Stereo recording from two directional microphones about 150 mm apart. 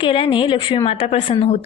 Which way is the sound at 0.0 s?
35° left (ahead or behind).